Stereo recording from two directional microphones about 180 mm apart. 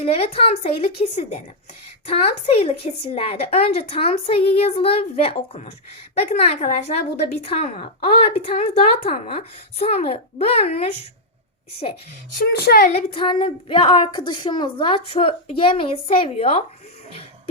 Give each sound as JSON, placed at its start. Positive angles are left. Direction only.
{"t": 0.0, "sound": "speech", "side_deg": 35}
{"t": 12.4, "sound": "speech", "side_deg": 65}
{"t": 12.9, "sound": "speech", "side_deg": 35}